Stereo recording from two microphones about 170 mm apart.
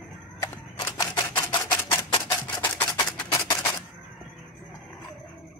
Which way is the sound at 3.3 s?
20° left (ahead or behind).